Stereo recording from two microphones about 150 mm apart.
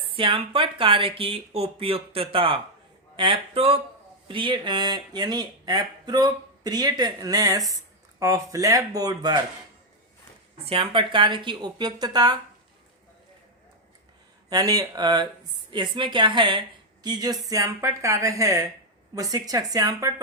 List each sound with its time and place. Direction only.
0.1 s speech: 35° right (ahead or behind)
10.7 s speech: 35° right (ahead or behind)
14.5 s a woman's voice: 25° right (ahead or behind)